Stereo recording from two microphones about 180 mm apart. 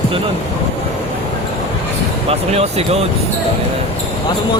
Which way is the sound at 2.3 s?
35° right (ahead or behind).